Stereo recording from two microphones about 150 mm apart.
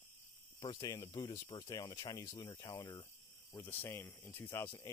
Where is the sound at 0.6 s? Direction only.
30° left (ahead or behind).